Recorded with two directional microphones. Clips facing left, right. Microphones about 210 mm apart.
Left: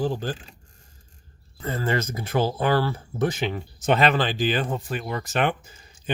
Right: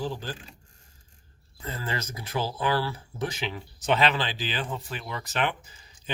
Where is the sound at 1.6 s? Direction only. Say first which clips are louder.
Left 8 dB; 55° left (ahead or behind).